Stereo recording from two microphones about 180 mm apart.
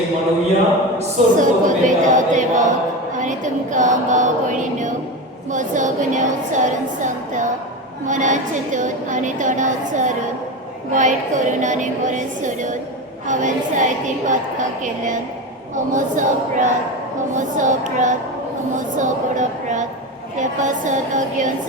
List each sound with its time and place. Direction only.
0.9 s a woman's voice: 45° right (ahead or behind)